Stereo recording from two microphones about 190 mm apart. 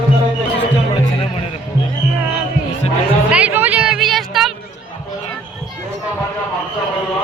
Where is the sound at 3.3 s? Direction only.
5° right (ahead or behind).